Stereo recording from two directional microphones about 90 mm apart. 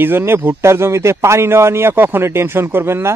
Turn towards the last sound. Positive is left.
turn(degrees=-25)  # may be behind; listen again after turning